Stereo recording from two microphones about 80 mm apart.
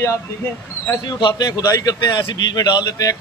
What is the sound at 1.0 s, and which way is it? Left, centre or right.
Speech, left.